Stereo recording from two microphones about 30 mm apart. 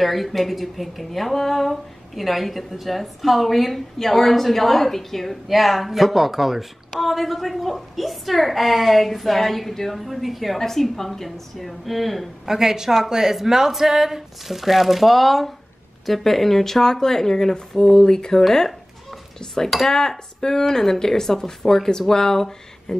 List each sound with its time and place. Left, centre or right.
0.0 s a woman's voice: centre
10.6 s a woman's voice: centre
12.4 s a woman's voice: centre
18.7 s a sound: centre
19.9 s speech: centre